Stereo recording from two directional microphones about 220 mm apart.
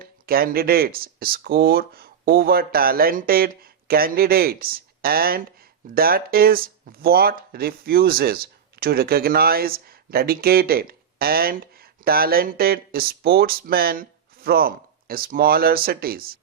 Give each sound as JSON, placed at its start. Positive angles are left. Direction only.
{"t": 0.0, "sound": "speech", "side_deg": -40}